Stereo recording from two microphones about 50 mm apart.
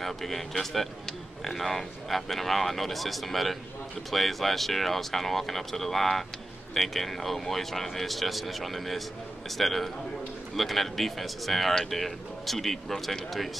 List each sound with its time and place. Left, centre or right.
0.0 s speech: centre